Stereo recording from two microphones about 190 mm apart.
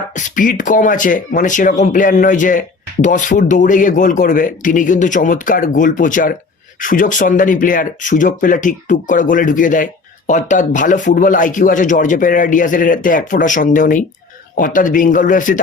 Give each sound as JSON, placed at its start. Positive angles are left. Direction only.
{"t": 0.2, "sound": "speech", "side_deg": 45}